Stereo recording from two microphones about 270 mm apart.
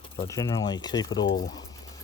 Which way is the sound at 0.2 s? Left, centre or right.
Centre.